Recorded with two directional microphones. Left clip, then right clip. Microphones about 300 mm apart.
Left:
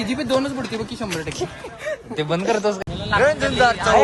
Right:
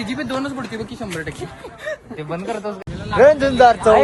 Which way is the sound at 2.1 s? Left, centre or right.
Left.